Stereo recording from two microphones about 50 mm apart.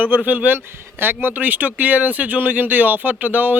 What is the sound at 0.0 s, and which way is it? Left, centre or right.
Speech, right.